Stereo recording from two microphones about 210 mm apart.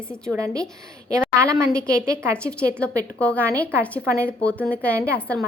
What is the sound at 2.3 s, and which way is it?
A woman's voice, 5° left (ahead or behind).